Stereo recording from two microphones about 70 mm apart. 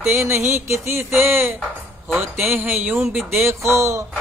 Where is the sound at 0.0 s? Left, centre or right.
Right.